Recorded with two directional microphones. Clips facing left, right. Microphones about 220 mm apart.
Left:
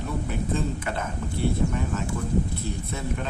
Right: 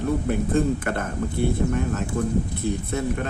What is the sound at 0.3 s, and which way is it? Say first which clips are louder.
Speech: right 6 dB; 55° right (ahead or behind).